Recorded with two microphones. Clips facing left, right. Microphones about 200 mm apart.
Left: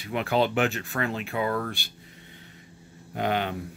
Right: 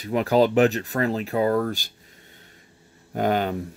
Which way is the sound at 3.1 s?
45° right (ahead or behind).